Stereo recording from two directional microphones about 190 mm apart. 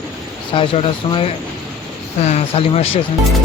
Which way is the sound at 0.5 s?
30° left (ahead or behind).